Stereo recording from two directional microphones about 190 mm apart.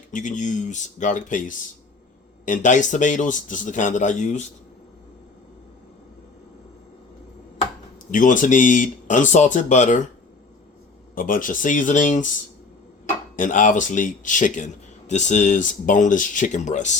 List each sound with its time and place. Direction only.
0.1 s speech: 40° left (ahead or behind)
8.1 s speech: 45° left (ahead or behind)
11.1 s speech: 45° left (ahead or behind)
13.3 s speech: 45° left (ahead or behind)